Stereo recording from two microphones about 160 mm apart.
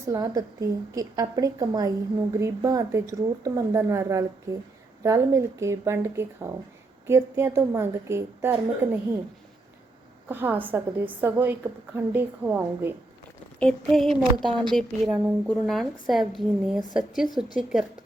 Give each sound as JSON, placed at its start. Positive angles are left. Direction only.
{"t": 0.0, "sound": "a woman's voice", "side_deg": -20}
{"t": 10.2, "sound": "a woman's voice", "side_deg": -10}
{"t": 13.6, "sound": "a woman's voice", "side_deg": 0}